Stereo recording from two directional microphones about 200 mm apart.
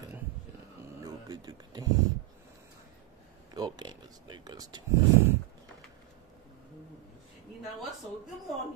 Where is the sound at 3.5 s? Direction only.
20° right (ahead or behind).